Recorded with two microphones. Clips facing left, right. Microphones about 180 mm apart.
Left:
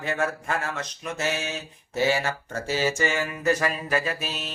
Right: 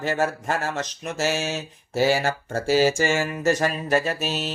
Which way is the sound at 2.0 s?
35° right (ahead or behind).